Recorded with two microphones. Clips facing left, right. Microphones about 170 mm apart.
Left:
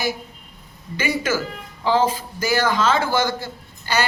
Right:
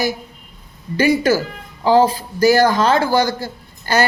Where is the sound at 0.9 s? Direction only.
40° right (ahead or behind).